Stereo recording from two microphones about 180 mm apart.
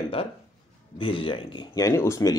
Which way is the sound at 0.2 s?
30° left (ahead or behind).